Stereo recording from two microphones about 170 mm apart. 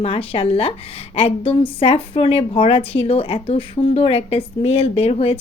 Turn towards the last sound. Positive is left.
turn(degrees=35)  # may be behind; listen again after turning